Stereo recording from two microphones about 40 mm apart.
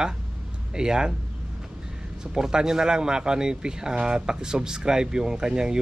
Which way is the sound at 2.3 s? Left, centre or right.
Centre.